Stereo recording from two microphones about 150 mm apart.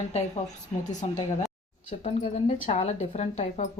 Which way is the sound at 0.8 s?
55° left (ahead or behind).